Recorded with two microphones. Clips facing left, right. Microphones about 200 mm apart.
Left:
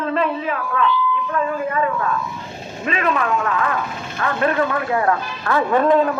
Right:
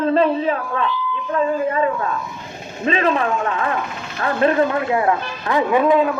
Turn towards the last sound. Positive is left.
turn(degrees=-5)  # may be behind; listen again after turning